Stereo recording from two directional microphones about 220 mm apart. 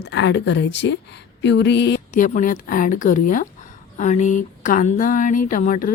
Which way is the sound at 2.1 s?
35° left (ahead or behind).